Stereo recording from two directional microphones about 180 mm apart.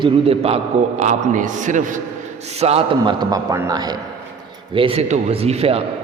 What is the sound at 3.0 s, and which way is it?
A man's voice, 20° right (ahead or behind).